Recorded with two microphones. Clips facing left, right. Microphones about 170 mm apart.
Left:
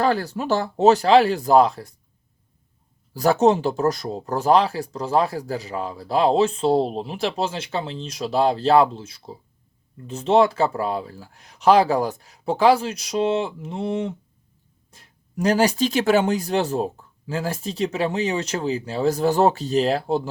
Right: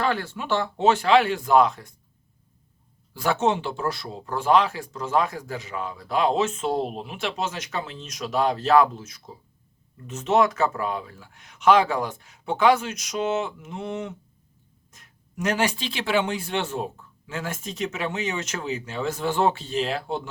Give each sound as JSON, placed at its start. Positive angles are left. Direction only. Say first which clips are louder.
{"t": 0.0, "sound": "speech", "louder": "left 5 dB", "side_deg": 40}
{"t": 3.1, "sound": "speech", "louder": "left 6 dB", "side_deg": 40}